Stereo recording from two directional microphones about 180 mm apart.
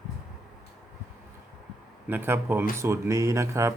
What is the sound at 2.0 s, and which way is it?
Speech, 10° right (ahead or behind).